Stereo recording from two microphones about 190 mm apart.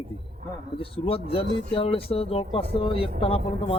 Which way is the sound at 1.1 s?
30° left (ahead or behind).